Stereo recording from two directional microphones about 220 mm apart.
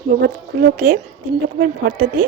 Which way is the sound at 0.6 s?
35° right (ahead or behind).